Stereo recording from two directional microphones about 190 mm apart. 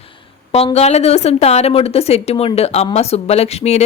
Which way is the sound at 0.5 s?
35° left (ahead or behind).